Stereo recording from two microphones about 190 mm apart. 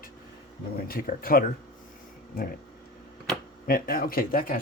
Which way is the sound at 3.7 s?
50° left (ahead or behind).